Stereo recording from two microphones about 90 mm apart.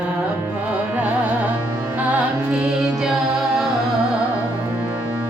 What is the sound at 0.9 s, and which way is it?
Music, 15° right (ahead or behind).